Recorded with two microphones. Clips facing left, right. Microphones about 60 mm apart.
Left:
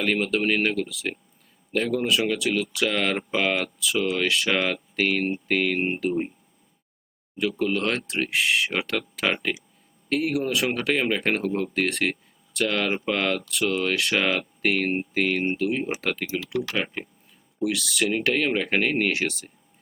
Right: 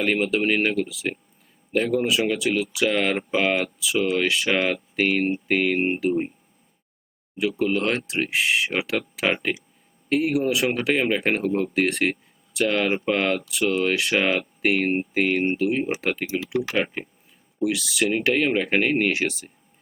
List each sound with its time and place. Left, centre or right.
0.0 s speech: centre
7.3 s speech: centre
16.7 s speech: centre
17.6 s speech: centre